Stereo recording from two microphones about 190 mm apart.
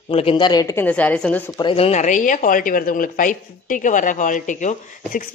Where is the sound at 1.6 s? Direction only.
30° left (ahead or behind).